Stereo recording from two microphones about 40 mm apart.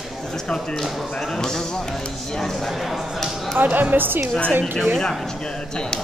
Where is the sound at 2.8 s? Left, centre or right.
Centre.